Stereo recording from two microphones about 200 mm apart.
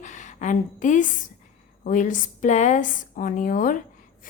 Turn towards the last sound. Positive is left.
turn(degrees=40)  # may be behind; listen again after turning